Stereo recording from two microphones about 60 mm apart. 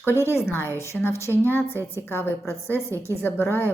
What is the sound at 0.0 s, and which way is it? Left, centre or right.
A woman's voice, left.